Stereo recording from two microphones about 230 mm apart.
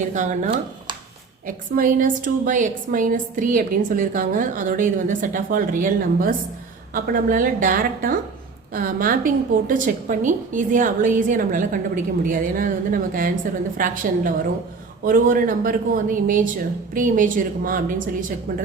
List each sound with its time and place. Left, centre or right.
0.1 s a woman's voice: right